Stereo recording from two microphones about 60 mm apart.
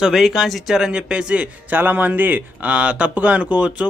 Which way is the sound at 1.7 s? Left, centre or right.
Right.